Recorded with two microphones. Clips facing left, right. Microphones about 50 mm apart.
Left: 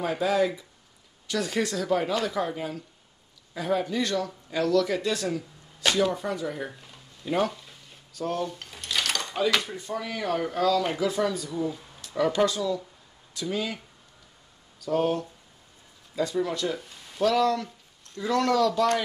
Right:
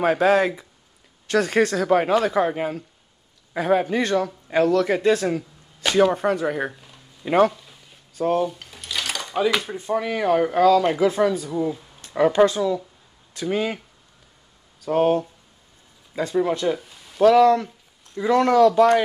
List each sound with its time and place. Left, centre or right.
0.0 s a man's voice: right
6.1 s speech: right
6.7 s a sound: centre
8.1 s speech: right
8.5 s a man's voice: centre; by 11.2 s right
11.2 s speech: right
14.9 s a man's voice: right
16.7 s a sound: centre
17.2 s speech: right